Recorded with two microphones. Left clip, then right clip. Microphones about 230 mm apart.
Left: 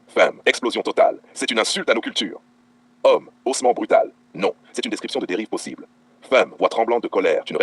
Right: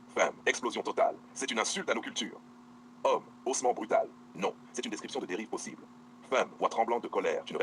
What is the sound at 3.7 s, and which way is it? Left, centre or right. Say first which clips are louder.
Speech: left 14 dB; left.